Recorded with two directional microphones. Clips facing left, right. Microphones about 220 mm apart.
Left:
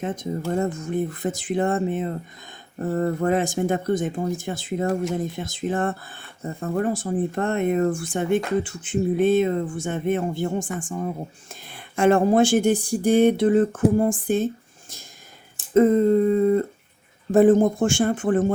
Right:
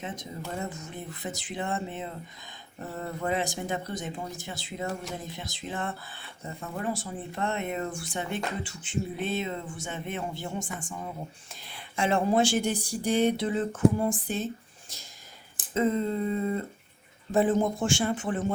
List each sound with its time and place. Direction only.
0.0 s speech: 50° left (ahead or behind)
15.7 s speech: 50° left (ahead or behind)